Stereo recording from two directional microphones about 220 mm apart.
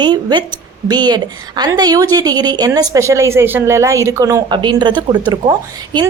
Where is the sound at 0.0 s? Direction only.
20° right (ahead or behind).